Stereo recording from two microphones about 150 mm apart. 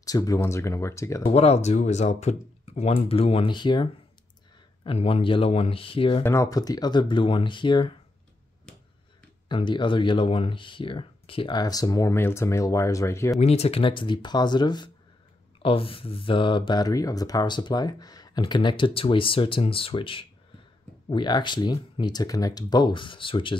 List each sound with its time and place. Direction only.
0.0 s speech: 25° left (ahead or behind)
1.2 s speech: 45° left (ahead or behind)
6.2 s speech: 20° left (ahead or behind)
9.5 s speech: 30° left (ahead or behind)
13.4 s speech: 45° left (ahead or behind)